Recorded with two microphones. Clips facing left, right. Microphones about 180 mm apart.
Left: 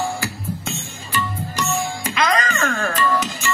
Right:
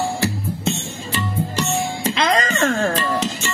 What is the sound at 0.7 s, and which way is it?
Music, 30° right (ahead or behind).